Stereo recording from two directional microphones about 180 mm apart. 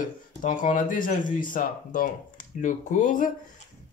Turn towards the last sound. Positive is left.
turn(degrees=45)  # may be behind; listen again after turning